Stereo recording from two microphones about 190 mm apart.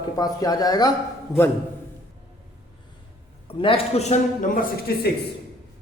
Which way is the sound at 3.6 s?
30° left (ahead or behind).